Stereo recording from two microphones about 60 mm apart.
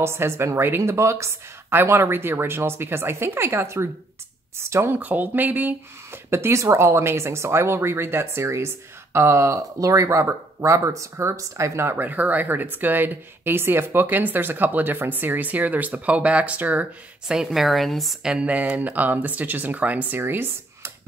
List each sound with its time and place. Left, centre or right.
0.0 s speech: right
1.7 s speech: right
4.9 s speech: right
6.3 s speech: right
12.0 s speech: right
17.5 s a woman's voice: centre
18.2 s speech: centre
20.2 s speech: right